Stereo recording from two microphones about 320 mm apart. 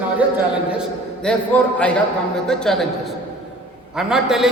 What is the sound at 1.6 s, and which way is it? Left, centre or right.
A man's voice, centre.